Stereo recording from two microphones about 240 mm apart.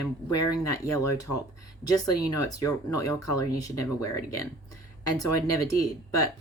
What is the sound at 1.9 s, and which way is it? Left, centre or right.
Speech, centre.